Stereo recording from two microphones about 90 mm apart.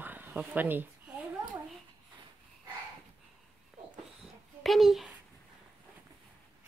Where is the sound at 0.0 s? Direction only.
20° right (ahead or behind).